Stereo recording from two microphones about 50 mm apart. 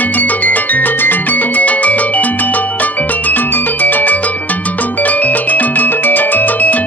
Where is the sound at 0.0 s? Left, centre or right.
Left.